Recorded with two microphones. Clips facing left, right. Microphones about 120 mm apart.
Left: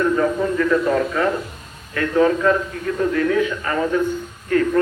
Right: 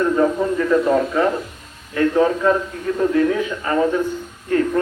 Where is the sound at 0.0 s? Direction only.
20° right (ahead or behind).